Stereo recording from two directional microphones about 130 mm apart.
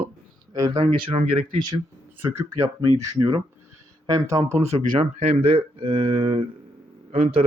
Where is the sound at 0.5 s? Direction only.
30° right (ahead or behind).